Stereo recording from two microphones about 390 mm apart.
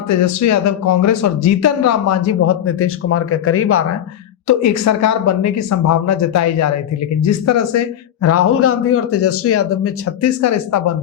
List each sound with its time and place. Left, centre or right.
0.1 s speech: left